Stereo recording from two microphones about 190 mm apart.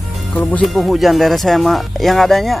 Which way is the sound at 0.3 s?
5° left (ahead or behind).